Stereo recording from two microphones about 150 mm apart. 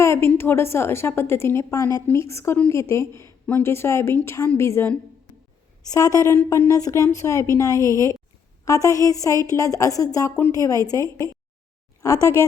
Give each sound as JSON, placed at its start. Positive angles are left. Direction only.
{"t": 0.0, "sound": "a woman's voice", "side_deg": 15}